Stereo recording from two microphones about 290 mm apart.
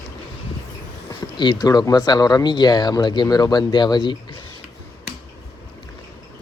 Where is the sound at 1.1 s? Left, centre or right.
Centre.